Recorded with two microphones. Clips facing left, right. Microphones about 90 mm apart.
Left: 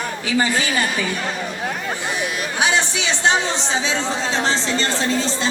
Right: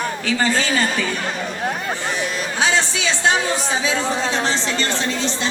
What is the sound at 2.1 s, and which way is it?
Speech, 15° left (ahead or behind).